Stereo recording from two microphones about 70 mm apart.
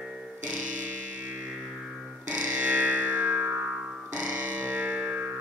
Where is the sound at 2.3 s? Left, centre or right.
Right.